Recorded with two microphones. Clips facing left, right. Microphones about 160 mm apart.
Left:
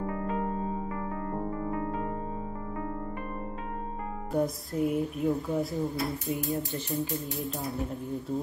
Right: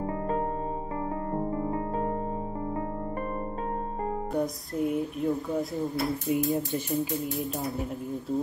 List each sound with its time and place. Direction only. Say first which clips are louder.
1.3 s music: right 3 dB; 25° right (ahead or behind)
4.3 s speech: even; centre (ahead or behind)
6.3 s speech: right 5 dB; 20° right (ahead or behind)